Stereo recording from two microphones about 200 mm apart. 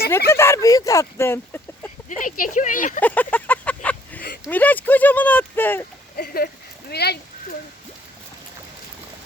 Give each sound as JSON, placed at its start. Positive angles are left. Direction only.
{"t": 0.3, "sound": "speech", "side_deg": 15}
{"t": 2.0, "sound": "speech", "side_deg": 40}
{"t": 3.0, "sound": "speech", "side_deg": 10}
{"t": 6.1, "sound": "speech", "side_deg": 45}